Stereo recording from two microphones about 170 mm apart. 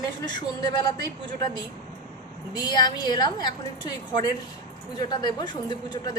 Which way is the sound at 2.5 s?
25° left (ahead or behind).